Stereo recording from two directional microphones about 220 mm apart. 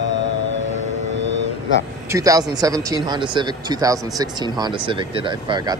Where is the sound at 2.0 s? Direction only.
15° right (ahead or behind).